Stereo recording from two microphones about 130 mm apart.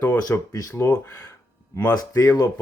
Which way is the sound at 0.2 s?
30° left (ahead or behind).